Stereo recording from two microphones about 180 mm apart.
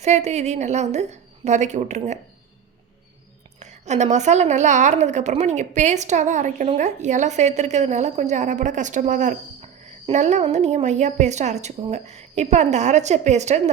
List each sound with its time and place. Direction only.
0.0 s a woman's voice: 40° right (ahead or behind)
3.6 s a woman's voice: 40° right (ahead or behind)